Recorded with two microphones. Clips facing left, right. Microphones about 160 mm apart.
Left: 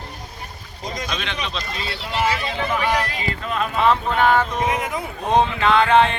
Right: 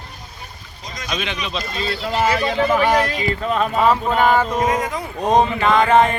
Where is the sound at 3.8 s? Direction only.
10° right (ahead or behind).